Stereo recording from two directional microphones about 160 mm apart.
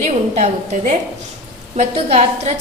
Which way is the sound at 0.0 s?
45° right (ahead or behind).